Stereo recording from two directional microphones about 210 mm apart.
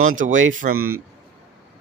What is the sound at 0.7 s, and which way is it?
Speech, 90° right.